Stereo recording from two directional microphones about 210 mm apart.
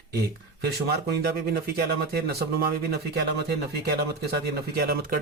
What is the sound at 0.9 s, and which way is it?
Speech, 45° right (ahead or behind).